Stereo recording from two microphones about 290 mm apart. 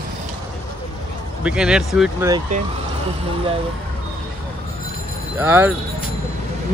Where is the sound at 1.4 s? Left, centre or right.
Centre.